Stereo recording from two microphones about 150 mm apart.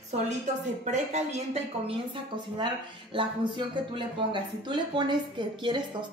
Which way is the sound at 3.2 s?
35° right (ahead or behind).